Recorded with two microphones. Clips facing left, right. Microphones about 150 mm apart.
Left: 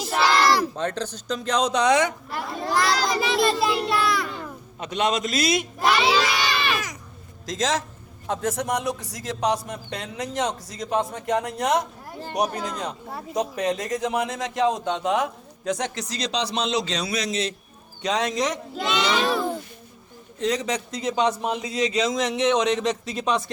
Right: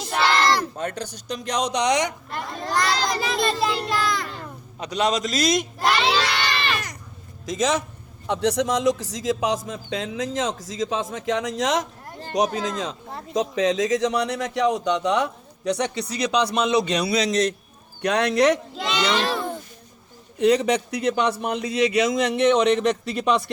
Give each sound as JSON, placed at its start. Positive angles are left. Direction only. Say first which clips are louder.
{"t": 0.0, "sound": "a sound", "louder": "left 1 dB", "side_deg": 5}
{"t": 1.0, "sound": "speech", "louder": "left 2 dB", "side_deg": -10}
{"t": 2.3, "sound": "a sound", "louder": "left 1 dB", "side_deg": 5}
{"t": 5.2, "sound": "a man's voice", "louder": "right 1 dB", "side_deg": -45}
{"t": 5.5, "sound": "crowd", "louder": "even", "side_deg": 5}
{"t": 7.4, "sound": "a man's voice", "louder": "right 2 dB", "side_deg": -65}
{"t": 8.3, "sound": "a man's voice", "louder": "right 4 dB", "side_deg": -85}
{"t": 13.1, "sound": "speech", "louder": "left 1 dB", "side_deg": 5}
{"t": 13.3, "sound": "a man's voice", "louder": "right 3 dB", "side_deg": -90}
{"t": 18.7, "sound": "children playing", "louder": "even", "side_deg": 0}
{"t": 20.4, "sound": "a man's voice", "louder": "right 6 dB", "side_deg": -65}